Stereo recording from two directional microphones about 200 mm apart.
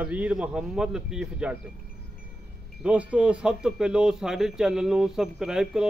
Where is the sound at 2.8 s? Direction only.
5° right (ahead or behind).